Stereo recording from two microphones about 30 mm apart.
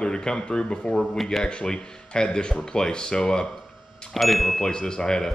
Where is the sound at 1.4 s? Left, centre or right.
Left.